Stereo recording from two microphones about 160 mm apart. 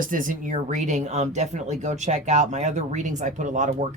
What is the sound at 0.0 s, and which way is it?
Speech, 55° right (ahead or behind).